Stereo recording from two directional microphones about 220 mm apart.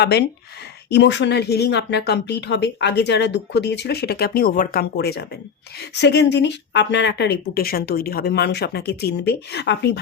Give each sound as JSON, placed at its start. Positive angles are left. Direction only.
{"t": 0.0, "sound": "speech", "side_deg": 50}